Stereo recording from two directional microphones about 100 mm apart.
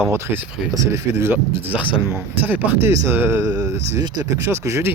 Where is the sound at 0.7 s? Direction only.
30° right (ahead or behind).